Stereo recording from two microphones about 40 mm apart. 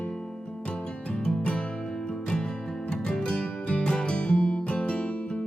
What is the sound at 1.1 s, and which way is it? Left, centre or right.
Music, left.